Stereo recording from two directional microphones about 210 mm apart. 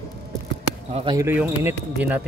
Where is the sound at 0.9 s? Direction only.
20° right (ahead or behind).